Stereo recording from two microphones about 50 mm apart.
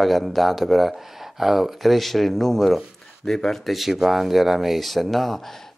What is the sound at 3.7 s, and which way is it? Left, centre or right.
Speech, centre.